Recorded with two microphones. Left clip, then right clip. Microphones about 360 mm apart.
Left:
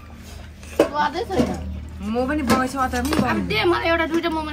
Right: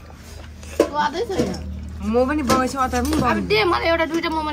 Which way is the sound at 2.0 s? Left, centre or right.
Right.